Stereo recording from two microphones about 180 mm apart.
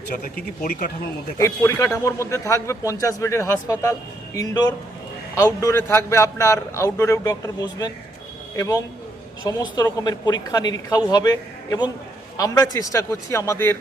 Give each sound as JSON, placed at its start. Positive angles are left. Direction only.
{"t": 0.1, "sound": "a man's voice", "side_deg": 50}
{"t": 1.4, "sound": "a man's voice", "side_deg": 15}